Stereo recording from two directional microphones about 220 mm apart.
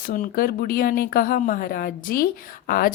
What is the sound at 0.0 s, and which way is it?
Speech, 40° left (ahead or behind).